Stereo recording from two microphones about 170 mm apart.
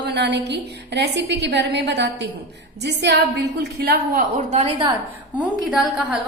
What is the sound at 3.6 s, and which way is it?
Speech, 70° right (ahead or behind).